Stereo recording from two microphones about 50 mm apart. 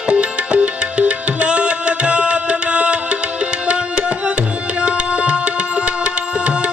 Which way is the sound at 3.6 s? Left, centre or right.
Right.